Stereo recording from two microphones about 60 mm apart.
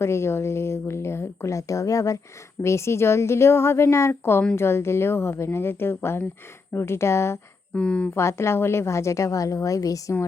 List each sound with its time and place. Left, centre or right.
0.0 s speech: left
7.7 s speech: centre
8.1 s a woman's voice: left